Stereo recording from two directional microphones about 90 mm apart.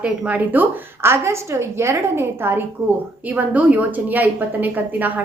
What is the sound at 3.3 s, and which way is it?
A woman's voice, 15° right (ahead or behind).